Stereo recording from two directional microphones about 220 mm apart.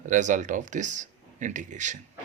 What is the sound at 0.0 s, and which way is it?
A man's voice, 35° right (ahead or behind).